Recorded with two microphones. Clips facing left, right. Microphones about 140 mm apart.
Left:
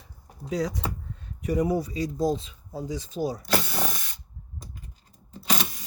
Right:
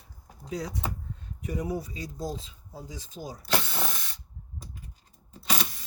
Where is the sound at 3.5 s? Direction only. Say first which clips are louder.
Left 3 dB; 10° left (ahead or behind).